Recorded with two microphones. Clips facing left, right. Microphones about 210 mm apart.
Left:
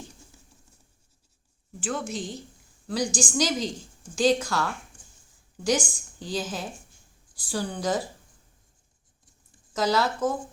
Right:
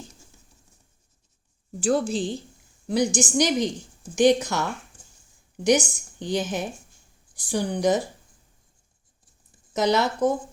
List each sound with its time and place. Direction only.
1.8 s a woman's voice: 35° right (ahead or behind); by 8.0 s 20° right (ahead or behind)
9.7 s a woman's voice: 20° right (ahead or behind)